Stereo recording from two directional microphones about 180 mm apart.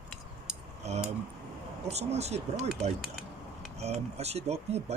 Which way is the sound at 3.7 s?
35° right (ahead or behind).